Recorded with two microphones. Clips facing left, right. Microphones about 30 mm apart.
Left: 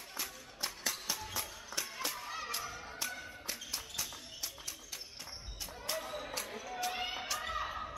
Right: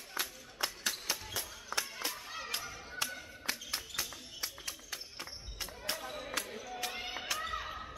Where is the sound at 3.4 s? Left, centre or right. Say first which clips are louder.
Right 7 dB; right.